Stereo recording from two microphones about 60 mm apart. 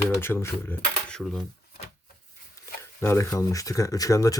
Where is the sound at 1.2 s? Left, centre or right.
Centre.